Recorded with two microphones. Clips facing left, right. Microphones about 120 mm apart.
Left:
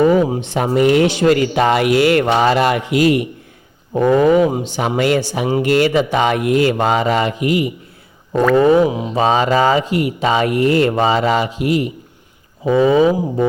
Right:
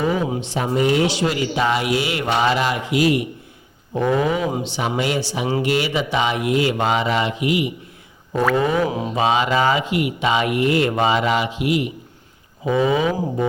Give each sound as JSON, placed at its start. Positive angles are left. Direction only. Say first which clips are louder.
{"t": 0.3, "sound": "speech", "louder": "left 5 dB", "side_deg": 55}
{"t": 2.2, "sound": "mantra", "louder": "left 4 dB", "side_deg": 30}
{"t": 2.5, "sound": "speech", "louder": "left 5 dB", "side_deg": 55}
{"t": 8.8, "sound": "mantra", "louder": "left 5 dB", "side_deg": 20}
{"t": 9.1, "sound": "speech", "louder": "left 4 dB", "side_deg": 40}